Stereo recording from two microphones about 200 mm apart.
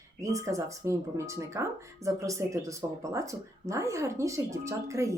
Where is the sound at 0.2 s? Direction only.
15° right (ahead or behind).